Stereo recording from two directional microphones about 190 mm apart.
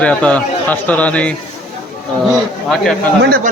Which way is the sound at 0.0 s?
5° left (ahead or behind).